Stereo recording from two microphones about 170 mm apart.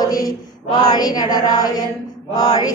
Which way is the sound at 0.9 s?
25° left (ahead or behind).